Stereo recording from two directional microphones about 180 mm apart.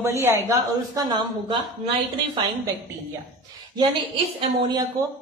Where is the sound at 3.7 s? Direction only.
25° right (ahead or behind).